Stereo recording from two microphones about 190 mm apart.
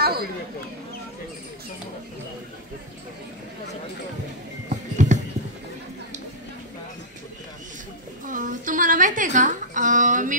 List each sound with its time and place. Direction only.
0.0 s a sound: 55° right (ahead or behind)
4.9 s music: 40° right (ahead or behind)
8.3 s speech: 45° right (ahead or behind)